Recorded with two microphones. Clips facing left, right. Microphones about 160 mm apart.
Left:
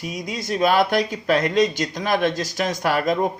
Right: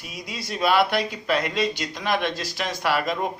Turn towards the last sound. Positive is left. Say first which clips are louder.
# left 4 dB
turn(degrees=45)  # may be behind; listen again after turning